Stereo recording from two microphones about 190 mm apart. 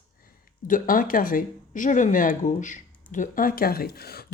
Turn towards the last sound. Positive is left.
turn(degrees=55)  # may be behind; listen again after turning